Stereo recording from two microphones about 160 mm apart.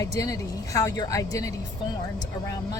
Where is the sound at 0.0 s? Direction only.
20° left (ahead or behind).